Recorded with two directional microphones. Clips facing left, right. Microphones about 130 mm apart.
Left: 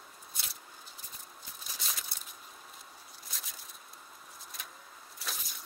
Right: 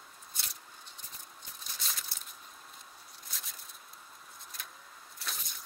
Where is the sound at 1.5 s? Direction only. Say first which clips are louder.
Left 1 dB; centre (ahead or behind).